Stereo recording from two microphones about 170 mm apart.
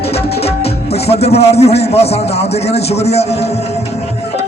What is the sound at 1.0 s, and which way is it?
A man's voice, 35° left (ahead or behind).